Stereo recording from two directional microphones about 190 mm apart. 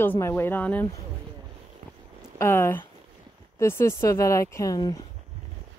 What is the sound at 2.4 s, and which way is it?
A woman's voice, 15° left (ahead or behind).